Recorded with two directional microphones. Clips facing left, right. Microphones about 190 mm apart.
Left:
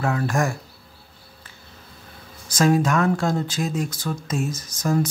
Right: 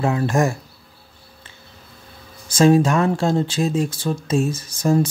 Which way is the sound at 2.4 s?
25° right (ahead or behind).